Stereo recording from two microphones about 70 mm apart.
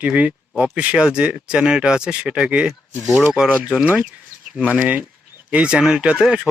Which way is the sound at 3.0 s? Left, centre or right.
Centre.